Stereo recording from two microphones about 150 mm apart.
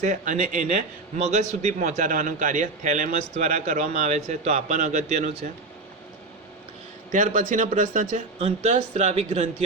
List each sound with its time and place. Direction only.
0.0 s a man's voice: 55° right (ahead or behind)
7.1 s speech: 60° right (ahead or behind)